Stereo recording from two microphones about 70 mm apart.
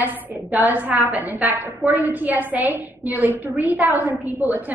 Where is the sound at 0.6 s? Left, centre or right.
Right.